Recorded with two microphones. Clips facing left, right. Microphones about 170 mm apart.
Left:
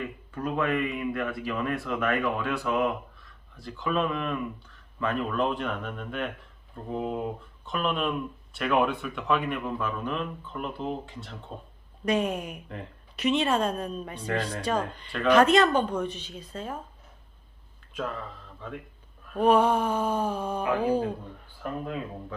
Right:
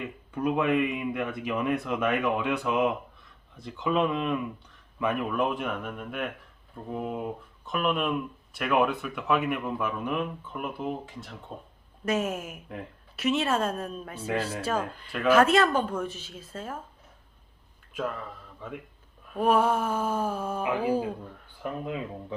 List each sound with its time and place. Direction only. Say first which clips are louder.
0.3 s a woman's voice: right 3 dB; 15° right (ahead or behind)
17.9 s speech: right 1 dB; 5° right (ahead or behind)
19.3 s a woman's voice: left 2 dB; 5° right (ahead or behind)
21.6 s speech: even; 20° right (ahead or behind)